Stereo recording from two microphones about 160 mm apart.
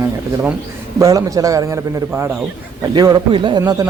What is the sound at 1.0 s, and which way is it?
Speech, 20° right (ahead or behind).